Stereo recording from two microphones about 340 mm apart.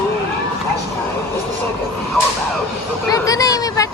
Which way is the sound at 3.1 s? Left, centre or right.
Centre.